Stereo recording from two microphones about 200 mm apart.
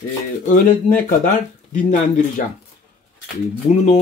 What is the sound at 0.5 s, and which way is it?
Speech, 40° left (ahead or behind).